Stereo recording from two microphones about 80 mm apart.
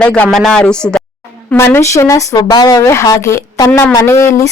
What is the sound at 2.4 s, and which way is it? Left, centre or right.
Speech, left.